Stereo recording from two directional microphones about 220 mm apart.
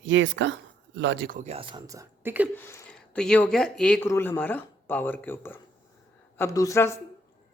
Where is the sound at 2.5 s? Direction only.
10° left (ahead or behind).